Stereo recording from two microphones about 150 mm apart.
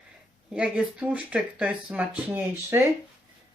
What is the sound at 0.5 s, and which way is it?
Speech, 10° right (ahead or behind).